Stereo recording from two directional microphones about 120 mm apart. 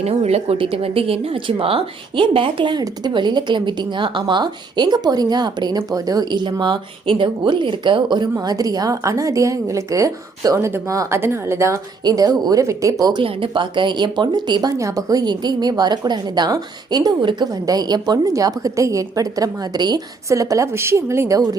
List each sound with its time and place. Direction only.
0.0 s a woman's voice: 60° right (ahead or behind)
0.5 s a woman's voice: 50° right (ahead or behind); by 11.8 s 20° right (ahead or behind)
12.0 s a woman's voice: 35° right (ahead or behind)
13.2 s a woman's voice: 45° right (ahead or behind); by 21.5 s 30° right (ahead or behind)